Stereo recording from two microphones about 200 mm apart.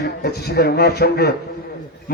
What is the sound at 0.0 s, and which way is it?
A man's voice, 55° left (ahead or behind).